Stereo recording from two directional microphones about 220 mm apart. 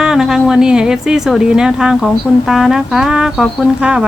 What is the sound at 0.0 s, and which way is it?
A woman's voice, centre (ahead or behind).